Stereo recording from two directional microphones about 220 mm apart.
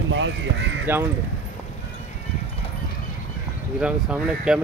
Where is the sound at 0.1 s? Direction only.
55° right (ahead or behind).